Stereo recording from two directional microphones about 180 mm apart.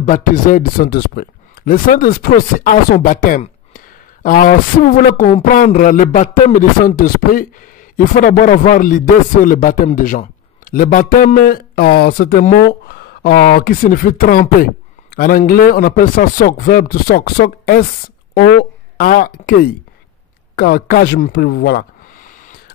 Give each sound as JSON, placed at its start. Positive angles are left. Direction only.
{"t": 0.0, "sound": "speech", "side_deg": 45}